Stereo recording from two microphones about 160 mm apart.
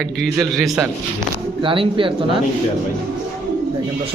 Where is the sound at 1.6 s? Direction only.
35° right (ahead or behind).